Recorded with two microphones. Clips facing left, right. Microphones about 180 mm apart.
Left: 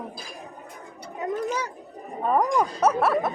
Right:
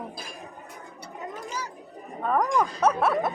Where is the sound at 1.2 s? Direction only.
60° left (ahead or behind).